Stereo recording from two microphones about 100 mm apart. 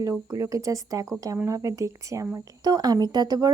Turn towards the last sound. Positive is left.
turn(degrees=-45)  # may be behind; listen again after turning